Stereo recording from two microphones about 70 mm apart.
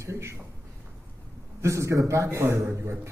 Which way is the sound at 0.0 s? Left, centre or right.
Right.